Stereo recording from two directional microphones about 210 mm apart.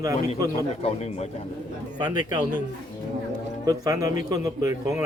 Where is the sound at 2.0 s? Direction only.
20° right (ahead or behind).